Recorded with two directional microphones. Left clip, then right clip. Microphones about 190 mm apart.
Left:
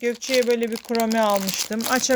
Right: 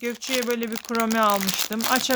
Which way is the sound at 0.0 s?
5° right (ahead or behind).